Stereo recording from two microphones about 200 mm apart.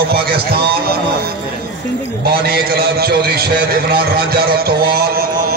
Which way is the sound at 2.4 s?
50° right (ahead or behind).